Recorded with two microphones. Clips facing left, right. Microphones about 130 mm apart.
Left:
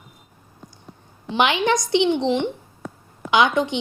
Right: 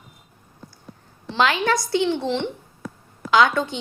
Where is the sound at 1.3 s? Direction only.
20° left (ahead or behind).